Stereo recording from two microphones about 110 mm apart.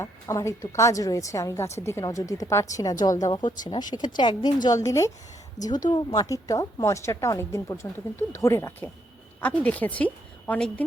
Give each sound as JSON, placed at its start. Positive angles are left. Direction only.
{"t": 0.0, "sound": "a woman's voice", "side_deg": 30}
{"t": 3.3, "sound": "speech", "side_deg": 40}
{"t": 4.8, "sound": "a woman's voice", "side_deg": 30}
{"t": 9.4, "sound": "a woman's voice", "side_deg": 10}